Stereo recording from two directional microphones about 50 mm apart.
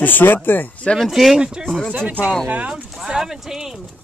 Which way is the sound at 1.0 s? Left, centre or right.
Centre.